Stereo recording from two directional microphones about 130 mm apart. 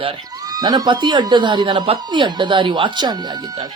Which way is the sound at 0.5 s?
30° right (ahead or behind).